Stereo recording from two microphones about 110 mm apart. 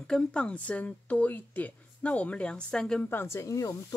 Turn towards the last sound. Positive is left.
turn(degrees=30)  # may be behind; listen again after turning